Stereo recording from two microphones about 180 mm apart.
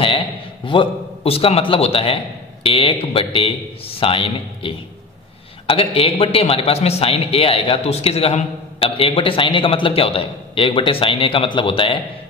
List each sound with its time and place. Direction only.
0.7 s a man's voice: 30° left (ahead or behind)